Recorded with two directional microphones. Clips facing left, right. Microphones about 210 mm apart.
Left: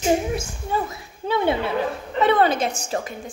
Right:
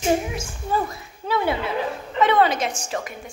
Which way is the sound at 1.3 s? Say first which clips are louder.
Left 2 dB; 25° left (ahead or behind).